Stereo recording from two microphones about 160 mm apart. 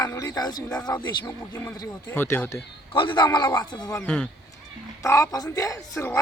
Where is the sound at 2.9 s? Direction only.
30° left (ahead or behind).